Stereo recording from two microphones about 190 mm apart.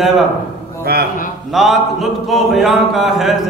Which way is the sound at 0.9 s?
55° right (ahead or behind).